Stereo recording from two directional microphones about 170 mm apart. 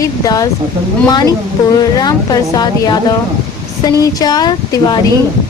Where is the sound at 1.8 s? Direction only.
25° left (ahead or behind).